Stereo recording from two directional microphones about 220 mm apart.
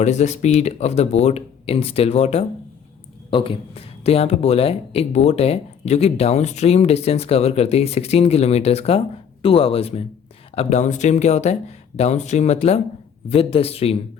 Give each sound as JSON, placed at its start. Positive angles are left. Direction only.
{"t": 0.0, "sound": "speech", "side_deg": 30}